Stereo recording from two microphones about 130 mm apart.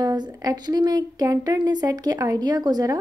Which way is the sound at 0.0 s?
30° right (ahead or behind).